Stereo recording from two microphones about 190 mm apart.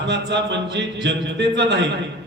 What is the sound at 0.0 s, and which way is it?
A man's voice, 65° right (ahead or behind).